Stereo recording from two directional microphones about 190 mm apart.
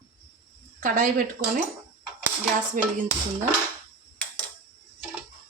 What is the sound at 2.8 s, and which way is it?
Speech, 45° right (ahead or behind).